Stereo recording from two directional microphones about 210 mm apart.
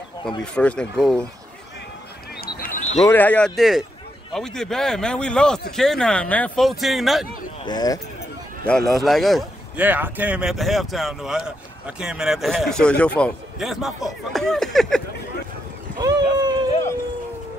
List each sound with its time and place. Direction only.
0.4 s a man's voice: 5° left (ahead or behind)
2.4 s a sound: 40° left (ahead or behind)
3.1 s a man's voice: 10° left (ahead or behind)
7.6 s speech: 20° left (ahead or behind)
8.6 s a man's voice: centre (ahead or behind)
16.0 s boat: 20° right (ahead or behind)